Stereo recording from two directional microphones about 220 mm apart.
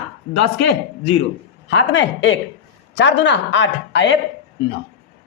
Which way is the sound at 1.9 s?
55° left (ahead or behind).